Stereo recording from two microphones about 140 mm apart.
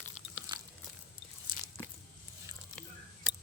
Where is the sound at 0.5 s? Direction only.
35° right (ahead or behind).